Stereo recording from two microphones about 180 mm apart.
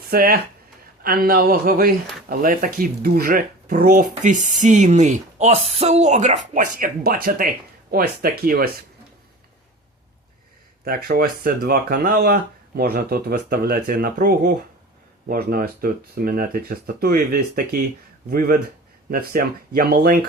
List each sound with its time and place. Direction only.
0.1 s speech: 55° right (ahead or behind)
10.8 s speech: 55° right (ahead or behind)